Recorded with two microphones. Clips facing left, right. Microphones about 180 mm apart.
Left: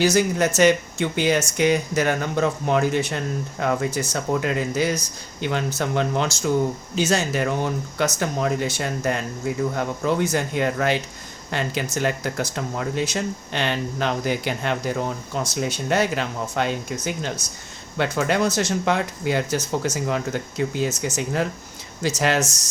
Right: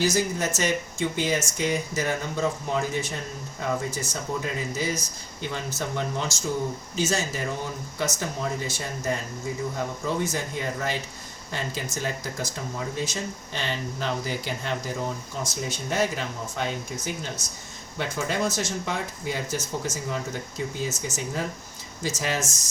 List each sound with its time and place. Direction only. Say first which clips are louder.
0.0 s speech: left 6 dB; 70° left (ahead or behind)
6.9 s speech: left 5 dB; 65° left (ahead or behind)